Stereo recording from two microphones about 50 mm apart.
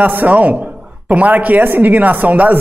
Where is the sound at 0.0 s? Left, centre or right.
Right.